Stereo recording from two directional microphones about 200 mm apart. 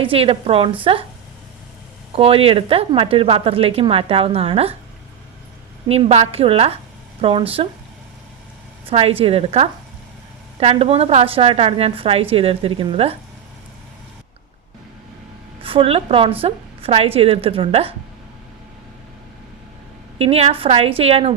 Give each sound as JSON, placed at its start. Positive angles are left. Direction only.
{"t": 0.0, "sound": "a woman's voice", "side_deg": -25}
{"t": 2.1, "sound": "a woman's voice", "side_deg": -30}
{"t": 5.9, "sound": "a woman's voice", "side_deg": -30}
{"t": 8.9, "sound": "a woman's voice", "side_deg": -30}
{"t": 15.6, "sound": "a woman's voice", "side_deg": -30}
{"t": 20.1, "sound": "a woman's voice", "side_deg": -30}